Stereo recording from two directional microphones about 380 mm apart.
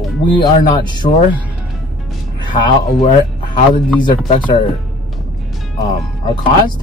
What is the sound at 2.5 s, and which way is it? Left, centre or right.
Speech, centre.